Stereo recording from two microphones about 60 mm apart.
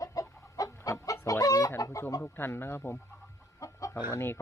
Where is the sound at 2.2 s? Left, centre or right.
Left.